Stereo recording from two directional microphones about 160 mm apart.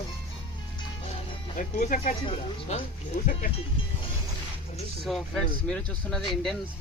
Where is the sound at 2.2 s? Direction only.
35° left (ahead or behind).